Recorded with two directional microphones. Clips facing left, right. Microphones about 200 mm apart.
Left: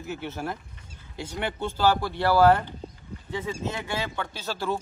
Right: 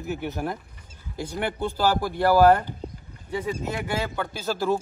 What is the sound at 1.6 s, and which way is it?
Speech, 15° right (ahead or behind).